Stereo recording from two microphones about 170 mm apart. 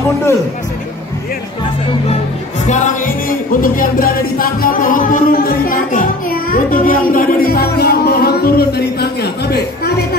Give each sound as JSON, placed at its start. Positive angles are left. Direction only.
{"t": 2.6, "sound": "music", "side_deg": 45}
{"t": 6.5, "sound": "a child's voice", "side_deg": 55}
{"t": 7.1, "sound": "music", "side_deg": 55}